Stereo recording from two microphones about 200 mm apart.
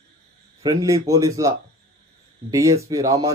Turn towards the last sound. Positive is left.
turn(degrees=-20)  # may be behind; listen again after turning